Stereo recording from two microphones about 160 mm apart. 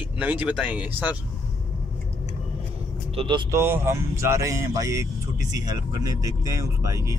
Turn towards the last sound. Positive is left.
turn(degrees=-20)  # may be behind; listen again after turning